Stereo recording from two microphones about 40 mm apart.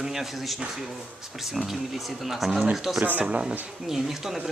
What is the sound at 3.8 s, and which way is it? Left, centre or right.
Speech, centre.